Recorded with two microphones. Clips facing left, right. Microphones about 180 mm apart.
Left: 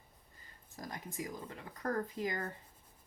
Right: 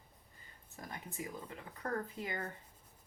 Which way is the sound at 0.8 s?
35° left (ahead or behind).